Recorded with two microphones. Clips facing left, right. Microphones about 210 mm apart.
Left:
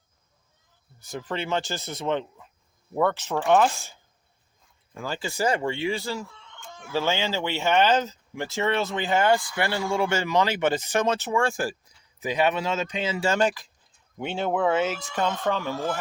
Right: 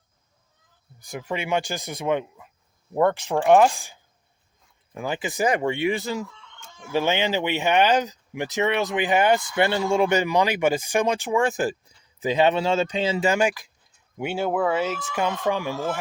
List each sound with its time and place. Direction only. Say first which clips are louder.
0.9 s speech: right 1 dB; 15° right (ahead or behind)
4.9 s speech: right 3 dB; 15° right (ahead or behind)
13.2 s speech: left 2 dB; 10° right (ahead or behind)